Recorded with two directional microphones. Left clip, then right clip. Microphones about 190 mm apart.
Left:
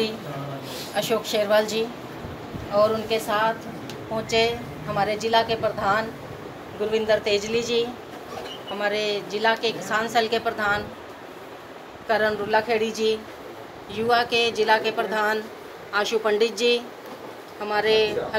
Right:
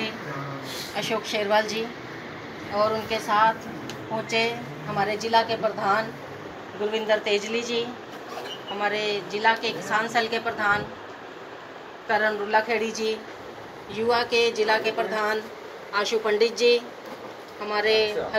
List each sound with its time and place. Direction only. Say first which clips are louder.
0.9 s a woman's voice: left 4 dB; 25° left (ahead or behind)
6.9 s a woman's voice: left 2 dB; 35° left (ahead or behind)
12.1 s a woman's voice: left 1 dB; 30° left (ahead or behind)
13.9 s a woman's voice: left 1 dB; 25° left (ahead or behind)